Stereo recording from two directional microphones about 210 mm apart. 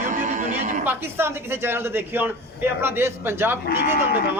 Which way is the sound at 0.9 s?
10° right (ahead or behind).